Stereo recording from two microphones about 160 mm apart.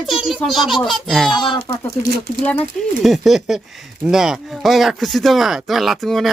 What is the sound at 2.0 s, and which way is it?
Speech, 75° right (ahead or behind).